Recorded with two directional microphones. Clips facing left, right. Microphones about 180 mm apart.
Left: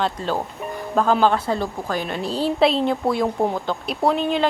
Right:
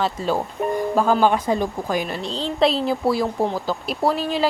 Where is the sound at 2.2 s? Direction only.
10° left (ahead or behind).